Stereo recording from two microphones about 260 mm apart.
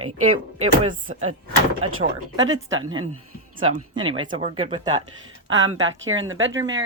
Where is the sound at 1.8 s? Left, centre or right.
Right.